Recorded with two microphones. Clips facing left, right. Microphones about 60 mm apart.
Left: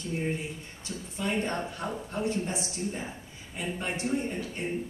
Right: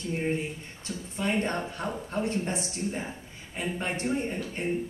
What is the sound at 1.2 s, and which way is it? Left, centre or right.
A woman's voice, right.